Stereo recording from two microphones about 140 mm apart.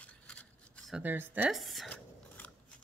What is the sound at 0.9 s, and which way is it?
Speech, 10° right (ahead or behind).